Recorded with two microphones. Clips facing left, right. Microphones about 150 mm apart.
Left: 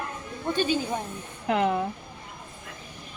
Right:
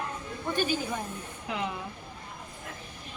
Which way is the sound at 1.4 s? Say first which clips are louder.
Left 10 dB; 55° left (ahead or behind).